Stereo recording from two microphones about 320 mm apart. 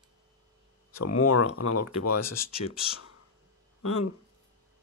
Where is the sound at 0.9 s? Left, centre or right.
Left.